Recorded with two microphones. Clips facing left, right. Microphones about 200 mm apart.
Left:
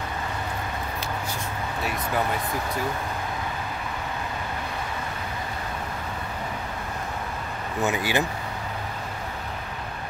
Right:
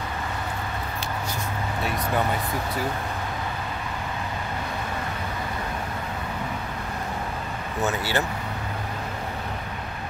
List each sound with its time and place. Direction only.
7.8 s speech: 15° left (ahead or behind)